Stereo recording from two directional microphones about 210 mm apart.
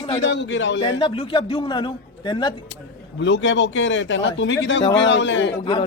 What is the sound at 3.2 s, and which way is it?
Speech, 60° left (ahead or behind).